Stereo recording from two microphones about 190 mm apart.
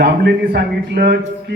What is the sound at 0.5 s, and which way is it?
A man's voice, 55° right (ahead or behind).